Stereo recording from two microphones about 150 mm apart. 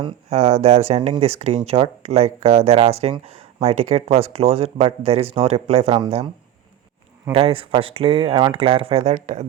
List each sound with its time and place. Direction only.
0.0 s speech: 45° right (ahead or behind)
7.3 s speech: 40° right (ahead or behind)
9.1 s speech: 55° right (ahead or behind)